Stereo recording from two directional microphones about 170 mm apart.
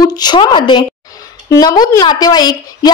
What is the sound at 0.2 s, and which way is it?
A woman's voice, 25° left (ahead or behind).